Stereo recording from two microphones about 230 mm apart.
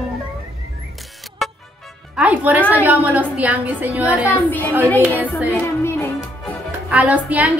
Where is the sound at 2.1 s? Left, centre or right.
Centre.